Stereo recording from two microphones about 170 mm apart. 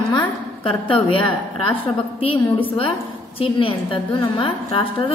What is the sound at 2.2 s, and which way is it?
A woman's voice, 30° left (ahead or behind).